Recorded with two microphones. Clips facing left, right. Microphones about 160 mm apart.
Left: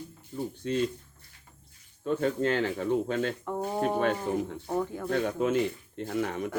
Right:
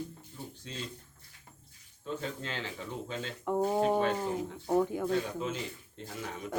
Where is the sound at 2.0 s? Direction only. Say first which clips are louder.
Left 11 dB; 60° left (ahead or behind).